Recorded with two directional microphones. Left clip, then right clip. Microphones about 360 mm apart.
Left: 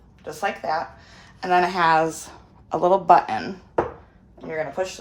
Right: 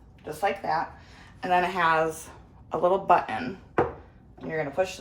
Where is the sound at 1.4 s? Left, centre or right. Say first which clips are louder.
Left 4 dB; left.